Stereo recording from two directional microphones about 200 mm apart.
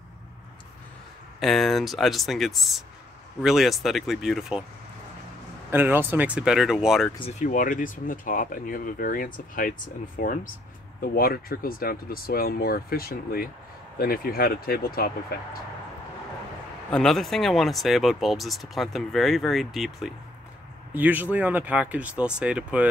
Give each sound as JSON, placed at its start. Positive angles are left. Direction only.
{"t": 1.4, "sound": "speech", "side_deg": 0}
{"t": 5.7, "sound": "speech", "side_deg": -10}
{"t": 7.2, "sound": "speech", "side_deg": 35}
{"t": 16.9, "sound": "speech", "side_deg": 0}